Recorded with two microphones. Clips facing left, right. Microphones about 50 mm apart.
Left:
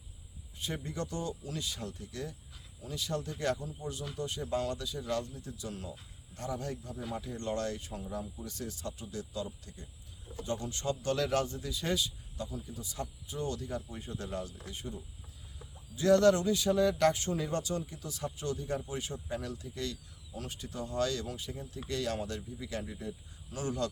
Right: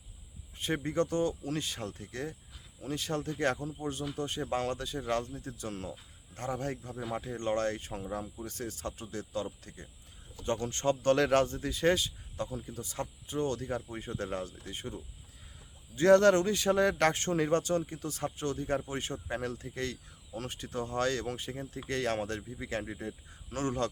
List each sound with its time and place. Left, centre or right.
0.6 s a man's voice: right
10.4 s a man's voice: right
16.0 s a man's voice: right